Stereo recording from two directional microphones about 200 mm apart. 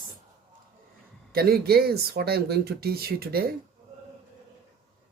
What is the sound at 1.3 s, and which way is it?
Speech, 50° right (ahead or behind).